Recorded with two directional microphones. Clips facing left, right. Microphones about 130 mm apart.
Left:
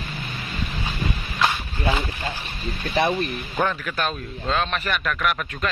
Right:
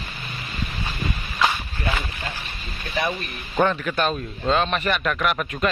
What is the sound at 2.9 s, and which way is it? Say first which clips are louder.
Speech: left 4 dB; 35° left (ahead or behind).